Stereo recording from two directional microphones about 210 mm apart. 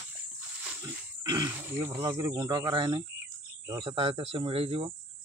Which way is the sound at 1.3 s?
15° right (ahead or behind).